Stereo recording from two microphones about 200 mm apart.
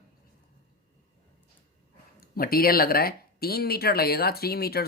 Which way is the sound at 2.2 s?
50° left (ahead or behind).